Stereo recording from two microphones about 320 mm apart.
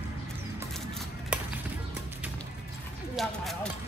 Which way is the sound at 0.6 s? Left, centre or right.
Centre.